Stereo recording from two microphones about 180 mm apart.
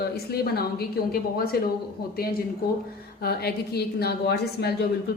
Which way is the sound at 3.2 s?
60° left (ahead or behind).